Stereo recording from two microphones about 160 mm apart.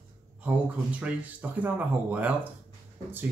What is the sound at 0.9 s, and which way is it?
Speech, 10° right (ahead or behind).